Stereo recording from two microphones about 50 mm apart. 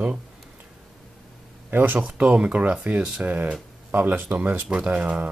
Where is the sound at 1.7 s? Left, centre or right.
Right.